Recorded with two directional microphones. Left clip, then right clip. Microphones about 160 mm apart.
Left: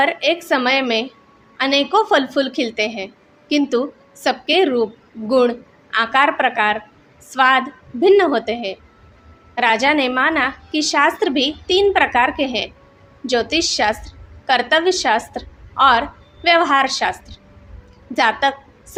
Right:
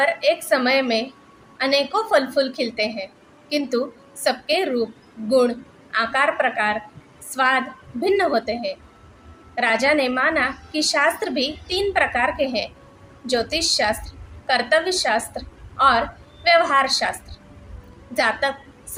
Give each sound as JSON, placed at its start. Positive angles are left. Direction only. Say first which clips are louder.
{"t": 0.0, "sound": "a woman's voice", "louder": "left 2 dB", "side_deg": 45}